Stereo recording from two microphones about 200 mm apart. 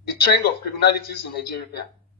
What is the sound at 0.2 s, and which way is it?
Speech, 50° left (ahead or behind).